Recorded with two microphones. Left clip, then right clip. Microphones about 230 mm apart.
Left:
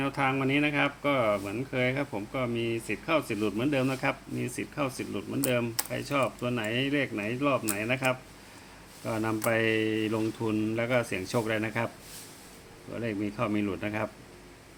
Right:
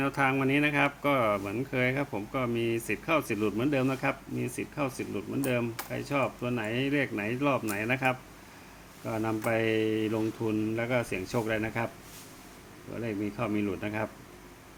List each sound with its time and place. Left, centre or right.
0.0 s speech: centre
13.0 s speech: centre